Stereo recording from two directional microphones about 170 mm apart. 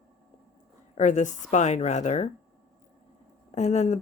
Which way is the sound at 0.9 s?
45° left (ahead or behind).